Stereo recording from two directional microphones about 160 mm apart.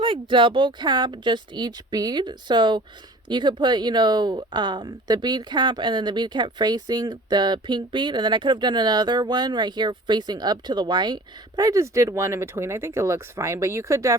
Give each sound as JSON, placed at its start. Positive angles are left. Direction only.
{"t": 0.0, "sound": "speech", "side_deg": -30}